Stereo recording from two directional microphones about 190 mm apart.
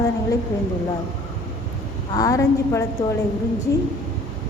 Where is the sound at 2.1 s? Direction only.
20° left (ahead or behind).